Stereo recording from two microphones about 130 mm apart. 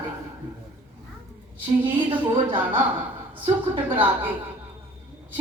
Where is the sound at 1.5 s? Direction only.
40° right (ahead or behind).